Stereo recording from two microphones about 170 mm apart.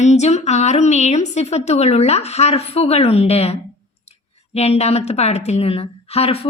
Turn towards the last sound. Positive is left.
turn(degrees=35)  # may be behind; listen again after turning